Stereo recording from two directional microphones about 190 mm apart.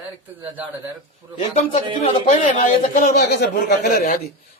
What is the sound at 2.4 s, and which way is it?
A man's voice, 45° left (ahead or behind).